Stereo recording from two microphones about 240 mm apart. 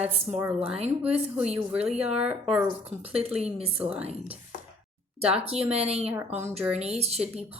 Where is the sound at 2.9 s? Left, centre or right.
Right.